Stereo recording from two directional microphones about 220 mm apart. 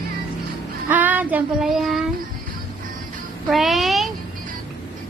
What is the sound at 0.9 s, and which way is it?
Child singing, 10° right (ahead or behind).